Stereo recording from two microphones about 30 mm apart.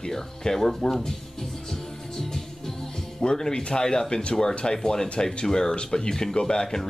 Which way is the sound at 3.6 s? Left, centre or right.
Left.